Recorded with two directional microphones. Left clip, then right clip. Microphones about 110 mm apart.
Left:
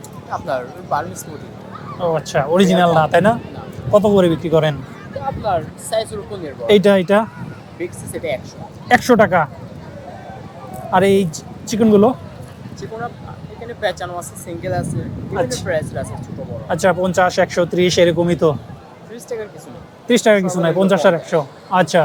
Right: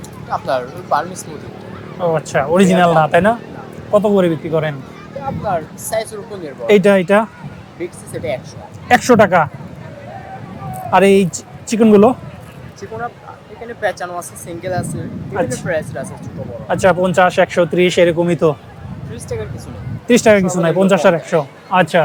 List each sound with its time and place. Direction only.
0.4 s speech: 35° right (ahead or behind)
2.0 s a man's voice: 5° right (ahead or behind)
4.4 s speech: 30° left (ahead or behind)
5.4 s speech: 5° left (ahead or behind)
7.8 s speech: 20° right (ahead or behind)
10.9 s speech: 15° right (ahead or behind)
13.8 s speech: 20° right (ahead or behind)
15.4 s speech: 5° right (ahead or behind)
17.7 s speech: 5° right (ahead or behind)
19.1 s a sound: 20° right (ahead or behind)
20.1 s speech: 20° right (ahead or behind)
21.7 s speech: 5° left (ahead or behind)